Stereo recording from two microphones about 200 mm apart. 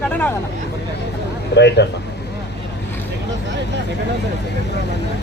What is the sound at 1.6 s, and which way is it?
Speech, 60° left (ahead or behind).